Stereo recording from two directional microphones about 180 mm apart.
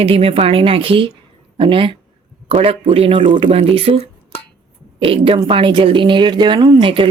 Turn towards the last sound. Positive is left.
turn(degrees=-30)  # may be behind; listen again after turning